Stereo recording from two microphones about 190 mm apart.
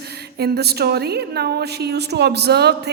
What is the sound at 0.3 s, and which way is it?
A woman's voice, 55° right (ahead or behind).